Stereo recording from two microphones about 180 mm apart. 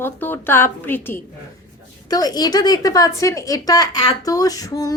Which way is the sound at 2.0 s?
20° left (ahead or behind).